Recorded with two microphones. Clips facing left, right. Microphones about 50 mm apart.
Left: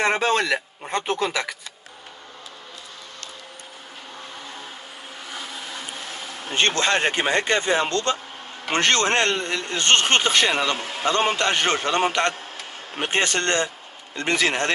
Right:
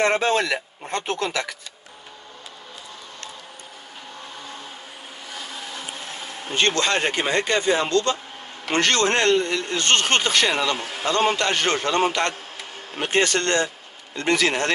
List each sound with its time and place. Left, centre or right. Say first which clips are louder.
0.0 s speech: right 1 dB; centre
6.5 s speech: even; left